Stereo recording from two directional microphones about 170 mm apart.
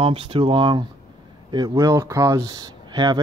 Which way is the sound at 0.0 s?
35° right (ahead or behind).